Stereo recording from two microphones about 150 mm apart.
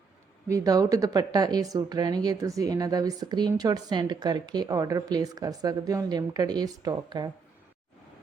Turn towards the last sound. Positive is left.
turn(degrees=-25)  # may be behind; listen again after turning